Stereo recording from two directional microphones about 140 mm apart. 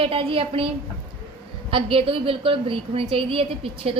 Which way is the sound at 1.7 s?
40° right (ahead or behind).